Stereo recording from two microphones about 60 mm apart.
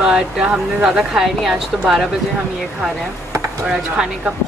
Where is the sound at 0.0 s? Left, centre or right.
Centre.